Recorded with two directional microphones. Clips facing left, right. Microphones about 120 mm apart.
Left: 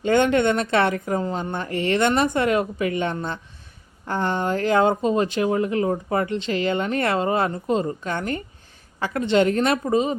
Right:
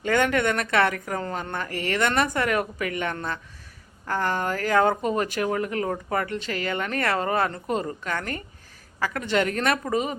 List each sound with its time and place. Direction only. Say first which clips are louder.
0.0 s speech: left 4 dB; 25° left (ahead or behind)